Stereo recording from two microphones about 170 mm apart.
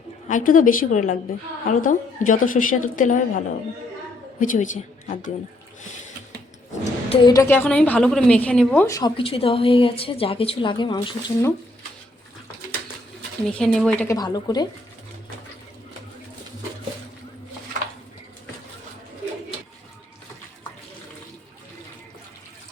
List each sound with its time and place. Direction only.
0.3 s a woman's voice: 50° left (ahead or behind)
6.8 s a woman's voice: 30° left (ahead or behind)
7.4 s a woman's voice: 10° left (ahead or behind)
8.9 s a woman's voice: 25° left (ahead or behind)
13.5 s a woman's voice: 5° left (ahead or behind)
14.1 s speech: 20° left (ahead or behind)